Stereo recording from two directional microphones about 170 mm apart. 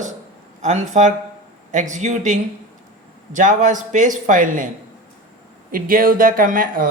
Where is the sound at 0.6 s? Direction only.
45° right (ahead or behind).